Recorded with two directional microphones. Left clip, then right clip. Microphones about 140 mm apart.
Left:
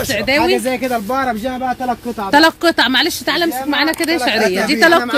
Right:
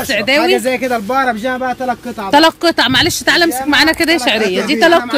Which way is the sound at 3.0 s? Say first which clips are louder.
Right 4 dB; 35° right (ahead or behind).